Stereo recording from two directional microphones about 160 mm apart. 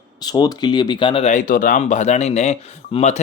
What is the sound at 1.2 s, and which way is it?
Speech, 55° left (ahead or behind).